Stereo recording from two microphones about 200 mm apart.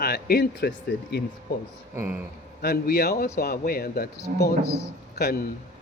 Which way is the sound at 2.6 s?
50° left (ahead or behind).